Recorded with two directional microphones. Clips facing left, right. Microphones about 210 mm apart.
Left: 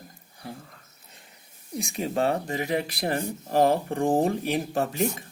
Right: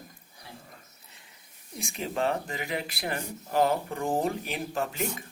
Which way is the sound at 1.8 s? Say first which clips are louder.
Left 4 dB; 40° left (ahead or behind).